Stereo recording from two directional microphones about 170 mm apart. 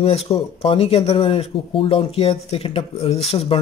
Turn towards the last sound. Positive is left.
turn(degrees=35)  # may be behind; listen again after turning